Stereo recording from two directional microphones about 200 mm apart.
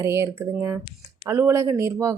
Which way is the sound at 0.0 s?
15° right (ahead or behind).